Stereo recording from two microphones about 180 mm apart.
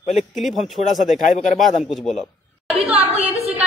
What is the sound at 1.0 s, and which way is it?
Speech, 45° left (ahead or behind).